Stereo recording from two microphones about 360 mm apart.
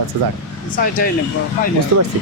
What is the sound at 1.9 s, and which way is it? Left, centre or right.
Speech, right.